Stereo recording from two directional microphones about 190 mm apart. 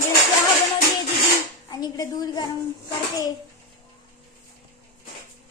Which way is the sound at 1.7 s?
20° left (ahead or behind).